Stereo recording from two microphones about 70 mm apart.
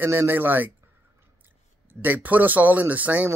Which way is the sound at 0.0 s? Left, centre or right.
Right.